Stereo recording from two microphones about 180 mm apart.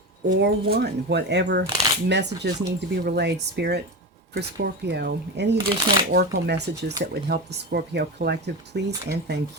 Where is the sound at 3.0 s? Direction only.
70° right (ahead or behind).